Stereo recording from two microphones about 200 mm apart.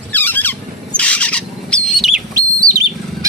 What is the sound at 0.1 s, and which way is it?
Squeak, 10° left (ahead or behind).